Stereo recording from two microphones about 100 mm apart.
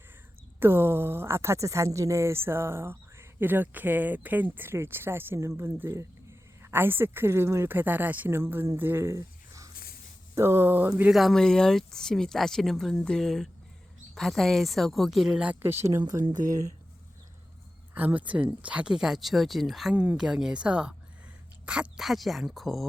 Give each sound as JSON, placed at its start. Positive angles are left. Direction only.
{"t": 0.6, "sound": "speech", "side_deg": -25}
{"t": 11.1, "sound": "speech", "side_deg": 0}
{"t": 15.6, "sound": "speech", "side_deg": -25}
{"t": 17.9, "sound": "speech", "side_deg": -15}
{"t": 19.9, "sound": "speech", "side_deg": -10}